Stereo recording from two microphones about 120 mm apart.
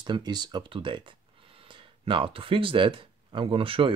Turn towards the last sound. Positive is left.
turn(degrees=-50)  # may be behind; listen again after turning